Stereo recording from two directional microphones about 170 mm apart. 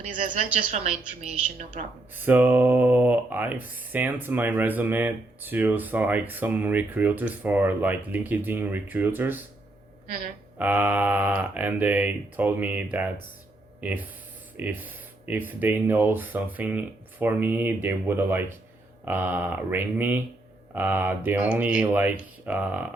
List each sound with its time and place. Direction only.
0.2 s a woman's voice: 45° right (ahead or behind)
2.1 s speech: 10° right (ahead or behind)
10.6 s speech: 10° right (ahead or behind)